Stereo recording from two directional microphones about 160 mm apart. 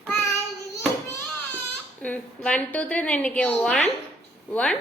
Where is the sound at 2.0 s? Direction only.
10° left (ahead or behind).